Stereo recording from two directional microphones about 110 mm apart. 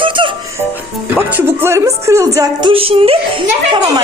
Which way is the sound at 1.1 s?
20° right (ahead or behind).